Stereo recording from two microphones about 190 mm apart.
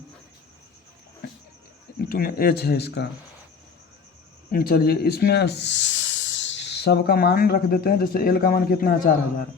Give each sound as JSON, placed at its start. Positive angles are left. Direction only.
{"t": 2.0, "sound": "speech", "side_deg": 50}
{"t": 4.5, "sound": "speech", "side_deg": 50}